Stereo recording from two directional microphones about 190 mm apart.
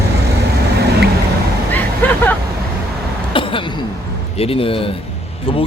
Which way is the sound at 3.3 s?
25° left (ahead or behind).